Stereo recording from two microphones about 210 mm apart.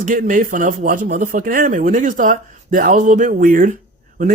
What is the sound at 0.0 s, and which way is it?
Speech, 40° right (ahead or behind).